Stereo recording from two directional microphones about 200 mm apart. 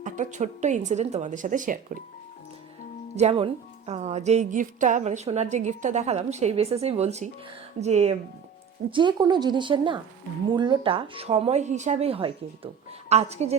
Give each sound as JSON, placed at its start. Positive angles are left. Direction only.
{"t": 0.0, "sound": "speech", "side_deg": -40}
{"t": 3.2, "sound": "speech", "side_deg": -30}
{"t": 8.9, "sound": "speech", "side_deg": -25}